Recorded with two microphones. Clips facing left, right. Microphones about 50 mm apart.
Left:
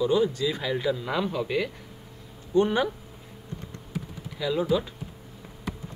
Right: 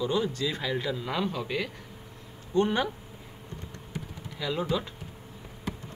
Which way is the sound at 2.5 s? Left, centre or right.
Centre.